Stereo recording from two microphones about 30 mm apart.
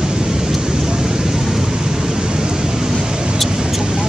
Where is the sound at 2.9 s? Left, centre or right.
Right.